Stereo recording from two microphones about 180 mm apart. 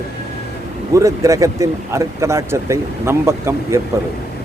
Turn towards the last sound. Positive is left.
turn(degrees=-15)  # may be behind; listen again after turning